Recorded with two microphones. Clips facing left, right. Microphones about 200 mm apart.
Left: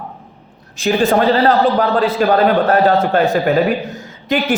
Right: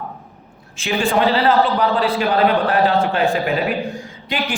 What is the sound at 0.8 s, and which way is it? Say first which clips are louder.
A woman's voice: left 4 dB; 40° left (ahead or behind).